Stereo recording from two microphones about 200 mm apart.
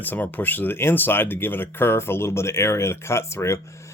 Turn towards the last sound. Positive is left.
turn(degrees=15)  # may be behind; listen again after turning